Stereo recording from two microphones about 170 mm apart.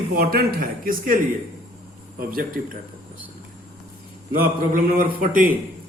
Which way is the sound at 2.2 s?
55° right (ahead or behind).